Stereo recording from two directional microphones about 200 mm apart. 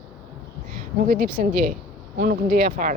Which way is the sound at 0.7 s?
50° right (ahead or behind).